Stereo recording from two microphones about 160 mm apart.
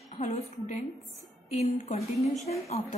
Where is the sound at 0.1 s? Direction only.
45° left (ahead or behind).